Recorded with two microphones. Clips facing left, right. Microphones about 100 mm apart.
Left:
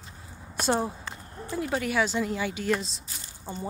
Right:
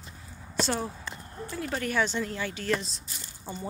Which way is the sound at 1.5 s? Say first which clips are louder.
Left 3 dB; 10° left (ahead or behind).